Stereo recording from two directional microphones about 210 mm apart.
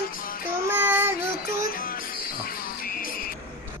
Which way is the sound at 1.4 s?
40° left (ahead or behind).